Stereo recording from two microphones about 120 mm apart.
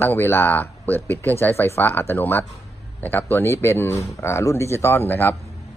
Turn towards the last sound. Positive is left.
turn(degrees=20)  # may be behind; listen again after turning